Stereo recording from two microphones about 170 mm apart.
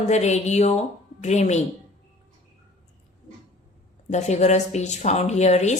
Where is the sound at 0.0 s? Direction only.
40° left (ahead or behind).